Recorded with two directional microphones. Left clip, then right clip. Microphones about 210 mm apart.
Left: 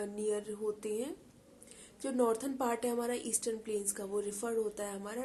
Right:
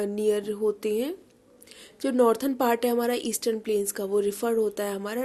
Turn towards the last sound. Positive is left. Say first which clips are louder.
# right 10 dB
turn(degrees=-40)  # may be behind; listen again after turning